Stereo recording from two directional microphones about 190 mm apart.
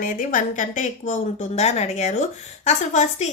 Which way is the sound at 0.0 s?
45° left (ahead or behind).